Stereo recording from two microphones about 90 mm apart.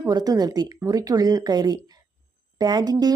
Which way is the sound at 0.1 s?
50° right (ahead or behind).